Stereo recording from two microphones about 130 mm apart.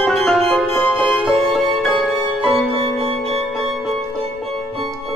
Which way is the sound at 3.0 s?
50° right (ahead or behind).